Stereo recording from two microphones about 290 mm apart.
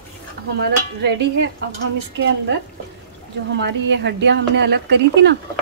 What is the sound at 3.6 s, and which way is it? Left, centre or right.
A woman's voice, right.